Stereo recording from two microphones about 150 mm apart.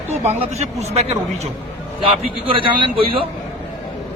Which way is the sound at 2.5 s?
35° right (ahead or behind).